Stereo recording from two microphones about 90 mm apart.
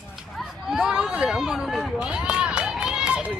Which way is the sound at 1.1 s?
5° right (ahead or behind).